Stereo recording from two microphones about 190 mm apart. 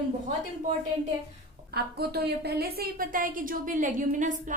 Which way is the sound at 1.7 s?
55° right (ahead or behind).